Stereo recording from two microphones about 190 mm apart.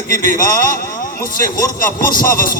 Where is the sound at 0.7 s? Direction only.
50° left (ahead or behind).